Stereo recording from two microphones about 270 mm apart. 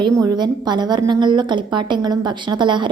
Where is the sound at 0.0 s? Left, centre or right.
Centre.